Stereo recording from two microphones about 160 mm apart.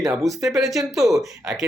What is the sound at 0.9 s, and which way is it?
Speech, centre (ahead or behind).